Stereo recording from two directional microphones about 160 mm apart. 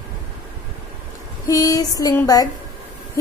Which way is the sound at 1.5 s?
20° left (ahead or behind).